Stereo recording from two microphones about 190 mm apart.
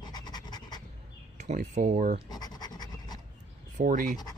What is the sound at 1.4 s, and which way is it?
Speech, 40° right (ahead or behind).